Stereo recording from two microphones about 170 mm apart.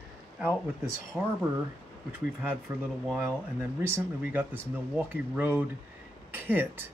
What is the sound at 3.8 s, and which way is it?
Speech, 10° right (ahead or behind).